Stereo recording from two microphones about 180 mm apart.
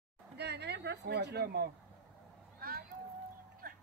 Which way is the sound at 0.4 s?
65° right (ahead or behind).